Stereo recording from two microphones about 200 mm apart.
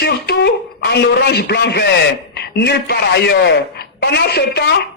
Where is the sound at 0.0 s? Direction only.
55° left (ahead or behind).